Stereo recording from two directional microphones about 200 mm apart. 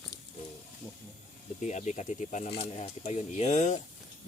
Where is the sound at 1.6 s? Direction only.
35° left (ahead or behind).